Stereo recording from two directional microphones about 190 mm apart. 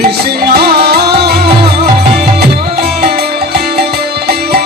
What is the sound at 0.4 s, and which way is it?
Music, 55° right (ahead or behind).